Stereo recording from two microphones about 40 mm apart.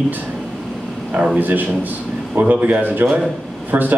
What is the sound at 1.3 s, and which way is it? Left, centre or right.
Speech, right.